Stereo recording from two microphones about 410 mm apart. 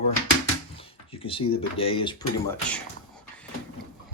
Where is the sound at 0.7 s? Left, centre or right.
Centre.